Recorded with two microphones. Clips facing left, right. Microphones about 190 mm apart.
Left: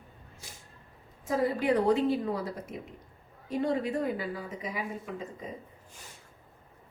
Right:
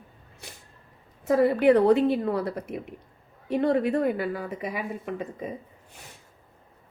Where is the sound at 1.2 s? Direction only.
65° right (ahead or behind).